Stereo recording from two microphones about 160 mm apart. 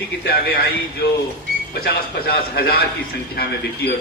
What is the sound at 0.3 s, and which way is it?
Speech, 75° left (ahead or behind).